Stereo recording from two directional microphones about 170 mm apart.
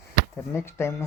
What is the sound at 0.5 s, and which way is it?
Speech, 15° left (ahead or behind).